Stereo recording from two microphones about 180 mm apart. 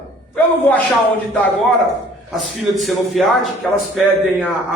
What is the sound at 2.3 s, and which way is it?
A man's voice, centre (ahead or behind).